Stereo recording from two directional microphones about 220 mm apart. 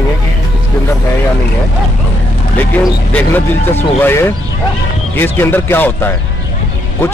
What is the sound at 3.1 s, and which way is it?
Speech, 10° left (ahead or behind).